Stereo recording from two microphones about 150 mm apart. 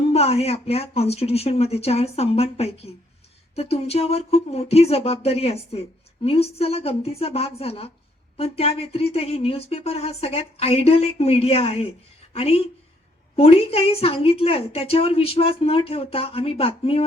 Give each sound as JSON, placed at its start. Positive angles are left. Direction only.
{"t": 0.1, "sound": "a woman's voice", "side_deg": 45}